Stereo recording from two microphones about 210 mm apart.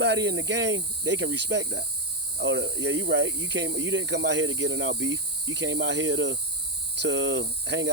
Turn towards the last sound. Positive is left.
turn(degrees=-55)  # may be behind; listen again after turning